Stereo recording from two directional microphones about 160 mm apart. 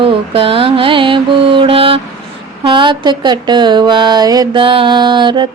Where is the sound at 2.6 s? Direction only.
30° right (ahead or behind).